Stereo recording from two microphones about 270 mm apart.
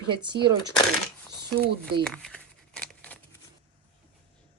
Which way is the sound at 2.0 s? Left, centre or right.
Centre.